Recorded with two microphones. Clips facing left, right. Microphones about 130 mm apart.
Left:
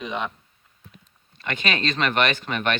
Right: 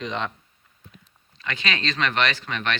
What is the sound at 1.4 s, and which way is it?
Speech, 50° left (ahead or behind).